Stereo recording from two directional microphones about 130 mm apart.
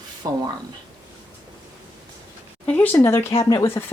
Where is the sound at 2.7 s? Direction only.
15° left (ahead or behind); by 3.6 s 30° left (ahead or behind).